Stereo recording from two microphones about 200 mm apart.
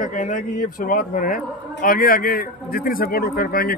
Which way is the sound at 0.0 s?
40° left (ahead or behind).